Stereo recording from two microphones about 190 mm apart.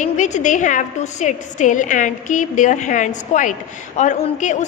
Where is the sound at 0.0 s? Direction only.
40° left (ahead or behind).